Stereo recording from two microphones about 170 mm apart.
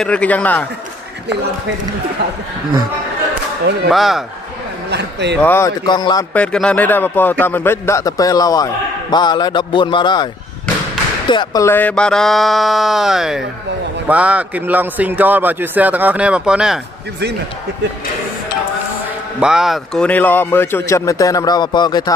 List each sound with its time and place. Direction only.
0.0 s speech: 5° left (ahead or behind)
3.9 s speech: centre (ahead or behind)
4.9 s speech: 90° right
5.4 s speech: 10° left (ahead or behind)
5.9 s speech: 25° left (ahead or behind)
6.3 s speech: 5° left (ahead or behind); by 10.2 s 25° left (ahead or behind)
11.2 s speech: 25° left (ahead or behind)
11.6 s a man's voice: 10° left (ahead or behind)
19.4 s speech: 5° right (ahead or behind); by 22.1 s 25° left (ahead or behind)